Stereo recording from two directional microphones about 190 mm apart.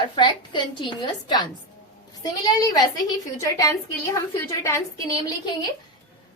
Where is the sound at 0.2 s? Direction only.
25° left (ahead or behind).